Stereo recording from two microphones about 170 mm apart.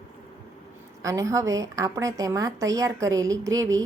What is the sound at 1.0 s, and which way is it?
A woman's voice, 20° right (ahead or behind).